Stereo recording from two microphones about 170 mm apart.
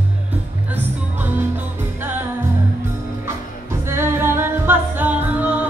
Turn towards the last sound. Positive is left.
turn(degrees=-10)  # may be behind; listen again after turning